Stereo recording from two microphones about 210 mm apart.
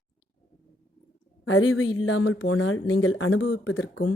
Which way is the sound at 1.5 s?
70° left (ahead or behind).